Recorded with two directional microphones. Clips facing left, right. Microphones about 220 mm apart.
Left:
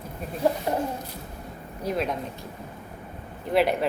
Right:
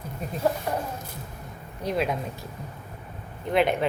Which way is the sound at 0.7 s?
25° left (ahead or behind).